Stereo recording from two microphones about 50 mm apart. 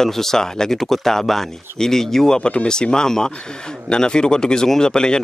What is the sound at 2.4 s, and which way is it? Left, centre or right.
Speech, left.